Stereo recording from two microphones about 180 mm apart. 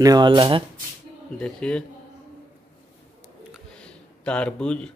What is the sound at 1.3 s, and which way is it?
Speech, 5° left (ahead or behind).